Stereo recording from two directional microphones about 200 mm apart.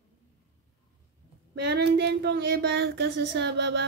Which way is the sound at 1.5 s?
55° right (ahead or behind).